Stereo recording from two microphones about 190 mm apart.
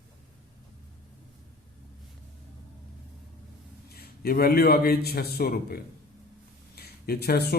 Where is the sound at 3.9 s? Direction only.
55° left (ahead or behind).